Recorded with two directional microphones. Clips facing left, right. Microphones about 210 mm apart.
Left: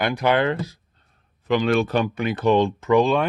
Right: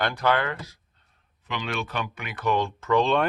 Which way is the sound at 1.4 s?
40° left (ahead or behind).